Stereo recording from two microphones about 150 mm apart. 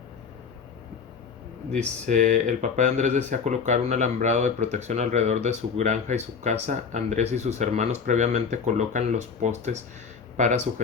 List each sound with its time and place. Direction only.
2.0 s speech: 55° right (ahead or behind)